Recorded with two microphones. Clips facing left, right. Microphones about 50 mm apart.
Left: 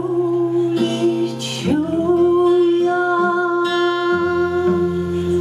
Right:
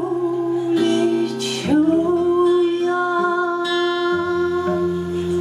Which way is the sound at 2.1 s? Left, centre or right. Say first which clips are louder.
Left 2 dB; left.